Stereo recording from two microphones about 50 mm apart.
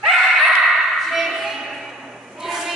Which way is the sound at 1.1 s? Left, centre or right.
Centre.